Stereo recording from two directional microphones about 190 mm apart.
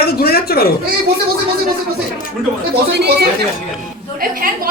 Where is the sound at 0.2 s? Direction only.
55° left (ahead or behind).